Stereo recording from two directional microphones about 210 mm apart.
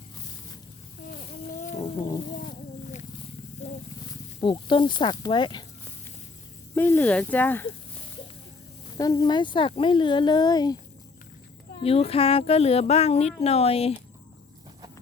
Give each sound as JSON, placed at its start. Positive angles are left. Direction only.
{"t": 1.5, "sound": "a sound", "side_deg": 35}
{"t": 2.0, "sound": "speech", "side_deg": 20}
{"t": 4.4, "sound": "speech", "side_deg": 25}
{"t": 6.7, "sound": "speech", "side_deg": 10}
{"t": 9.0, "sound": "speech", "side_deg": 15}
{"t": 11.8, "sound": "speech", "side_deg": 30}